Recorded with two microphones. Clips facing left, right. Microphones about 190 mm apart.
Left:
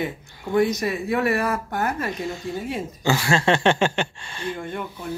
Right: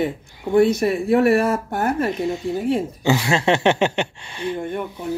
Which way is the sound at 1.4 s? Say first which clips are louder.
Right 4 dB; 30° right (ahead or behind).